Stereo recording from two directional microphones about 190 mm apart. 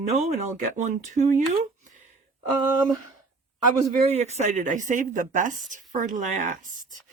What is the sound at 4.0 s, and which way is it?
Speech, 35° right (ahead or behind).